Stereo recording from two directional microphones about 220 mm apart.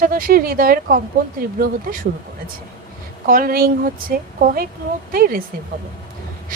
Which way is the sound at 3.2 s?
40° right (ahead or behind).